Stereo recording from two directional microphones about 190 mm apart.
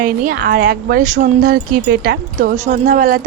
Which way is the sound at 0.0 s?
50° right (ahead or behind).